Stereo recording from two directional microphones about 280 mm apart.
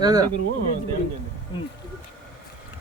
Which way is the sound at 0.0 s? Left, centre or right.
Centre.